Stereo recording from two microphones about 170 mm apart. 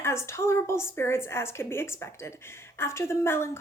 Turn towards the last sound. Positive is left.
turn(degrees=15)  # may be behind; listen again after turning